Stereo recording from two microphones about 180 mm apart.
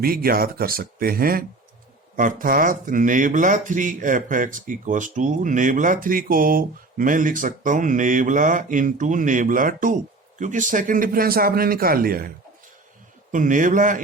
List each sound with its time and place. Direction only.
0.0 s speech: 55° right (ahead or behind)
13.3 s speech: 45° right (ahead or behind)